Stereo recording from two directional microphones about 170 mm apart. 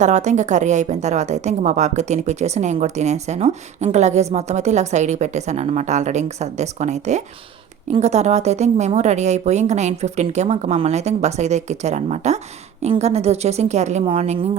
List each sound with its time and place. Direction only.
0.0 s a woman's voice: 45° right (ahead or behind)